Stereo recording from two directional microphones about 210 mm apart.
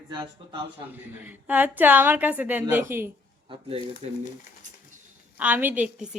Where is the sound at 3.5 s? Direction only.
30° right (ahead or behind).